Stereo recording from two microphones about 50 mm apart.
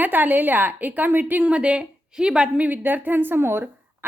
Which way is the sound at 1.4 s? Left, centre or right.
Right.